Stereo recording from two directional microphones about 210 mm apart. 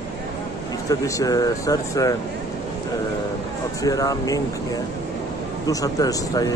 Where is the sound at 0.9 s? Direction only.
15° left (ahead or behind).